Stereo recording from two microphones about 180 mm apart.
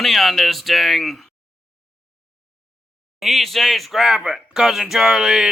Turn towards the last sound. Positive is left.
turn(degrees=-5)  # may be behind; listen again after turning